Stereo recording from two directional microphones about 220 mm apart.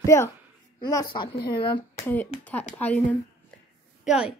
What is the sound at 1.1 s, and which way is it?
Speech, 20° left (ahead or behind).